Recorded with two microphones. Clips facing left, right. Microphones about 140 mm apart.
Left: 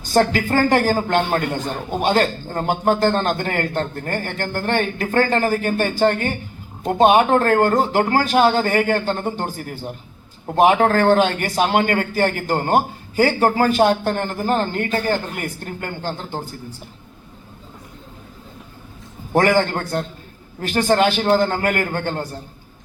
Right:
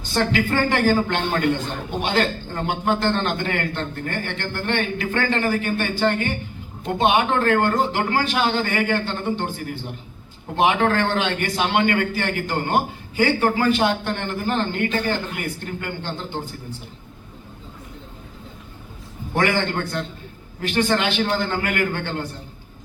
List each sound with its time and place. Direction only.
0.0 s a man's voice: 40° left (ahead or behind)
19.3 s a man's voice: 40° left (ahead or behind)